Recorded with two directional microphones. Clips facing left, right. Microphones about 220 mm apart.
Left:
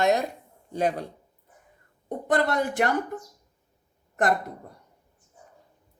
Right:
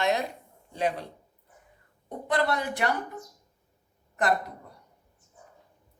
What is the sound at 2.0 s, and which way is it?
Speech, 45° left (ahead or behind).